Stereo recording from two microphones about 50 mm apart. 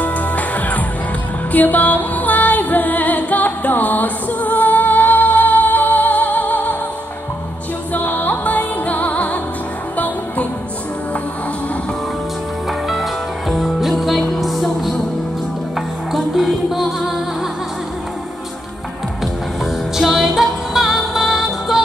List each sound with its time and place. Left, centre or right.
0.0 s music: left
7.9 s music: left
13.5 s music: centre
16.1 s music: centre
20.0 s music: centre